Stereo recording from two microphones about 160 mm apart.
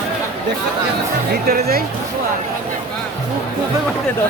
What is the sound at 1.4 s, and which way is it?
Speech, 70° right (ahead or behind).